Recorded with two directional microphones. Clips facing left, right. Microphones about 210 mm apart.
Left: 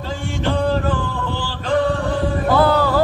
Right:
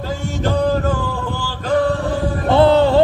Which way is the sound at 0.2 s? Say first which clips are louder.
Even; 40° right (ahead or behind).